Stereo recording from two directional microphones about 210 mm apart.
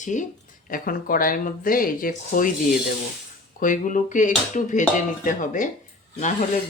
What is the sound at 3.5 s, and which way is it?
Speech, 40° left (ahead or behind).